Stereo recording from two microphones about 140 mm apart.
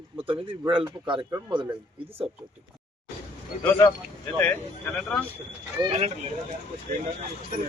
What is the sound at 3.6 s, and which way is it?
Speech, 10° left (ahead or behind).